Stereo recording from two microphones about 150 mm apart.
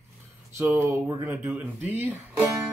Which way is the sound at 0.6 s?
15° right (ahead or behind).